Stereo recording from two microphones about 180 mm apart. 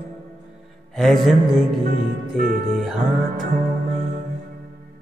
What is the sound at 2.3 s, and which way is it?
Speech, 50° right (ahead or behind).